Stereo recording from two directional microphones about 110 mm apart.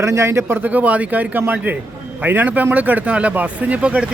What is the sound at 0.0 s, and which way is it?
Speech, 25° right (ahead or behind).